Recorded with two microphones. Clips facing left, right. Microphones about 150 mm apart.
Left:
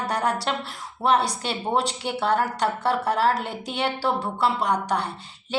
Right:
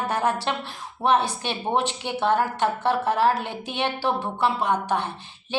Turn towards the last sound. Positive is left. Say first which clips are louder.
# even
turn(degrees=-20)  # may be behind; listen again after turning